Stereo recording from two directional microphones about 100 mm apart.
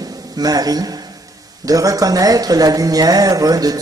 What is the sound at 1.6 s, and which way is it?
Speech, 35° right (ahead or behind).